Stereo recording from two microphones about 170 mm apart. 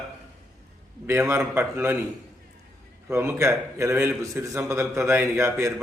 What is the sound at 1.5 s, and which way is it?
Speech, 15° right (ahead or behind).